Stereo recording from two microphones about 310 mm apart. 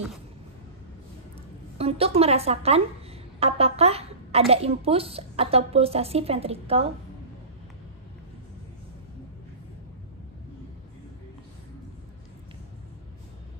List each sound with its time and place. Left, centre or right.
1.8 s a woman's voice: centre